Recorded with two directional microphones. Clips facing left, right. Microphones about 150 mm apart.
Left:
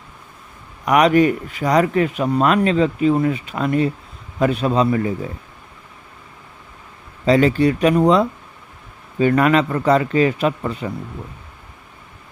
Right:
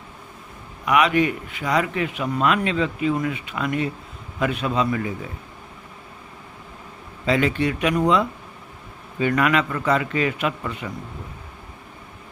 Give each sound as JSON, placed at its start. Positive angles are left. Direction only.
{"t": 0.9, "sound": "speech", "side_deg": 40}
{"t": 7.3, "sound": "speech", "side_deg": 35}